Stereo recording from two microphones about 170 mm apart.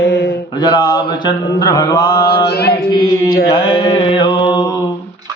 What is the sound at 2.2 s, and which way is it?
Mantra, 75° left (ahead or behind).